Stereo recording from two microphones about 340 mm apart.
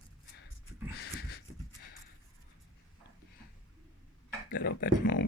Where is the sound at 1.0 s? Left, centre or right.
Left.